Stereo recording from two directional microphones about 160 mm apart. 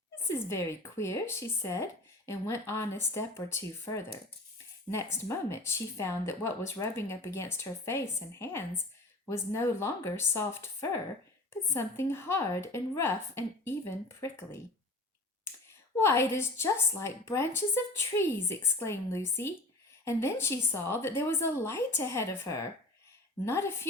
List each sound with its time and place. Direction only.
0.3 s a woman's voice: 15° left (ahead or behind)
16.0 s a woman's voice: 15° left (ahead or behind)